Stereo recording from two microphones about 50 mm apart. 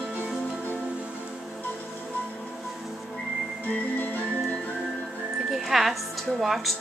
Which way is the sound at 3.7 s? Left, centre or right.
Left.